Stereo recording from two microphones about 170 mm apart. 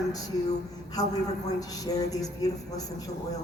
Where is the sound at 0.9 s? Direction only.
20° left (ahead or behind).